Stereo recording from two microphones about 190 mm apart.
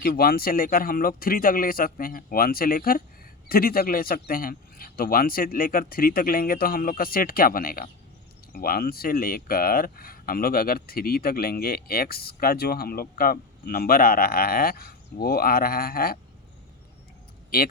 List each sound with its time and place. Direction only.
0.0 s speech: 50° left (ahead or behind)
17.5 s speech: 50° left (ahead or behind)